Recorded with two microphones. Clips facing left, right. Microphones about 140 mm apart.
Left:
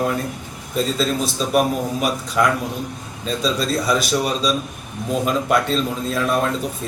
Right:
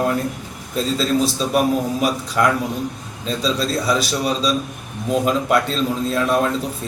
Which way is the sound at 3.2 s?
Centre (ahead or behind).